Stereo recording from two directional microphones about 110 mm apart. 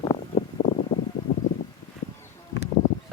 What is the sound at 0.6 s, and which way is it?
Wind, 90° left.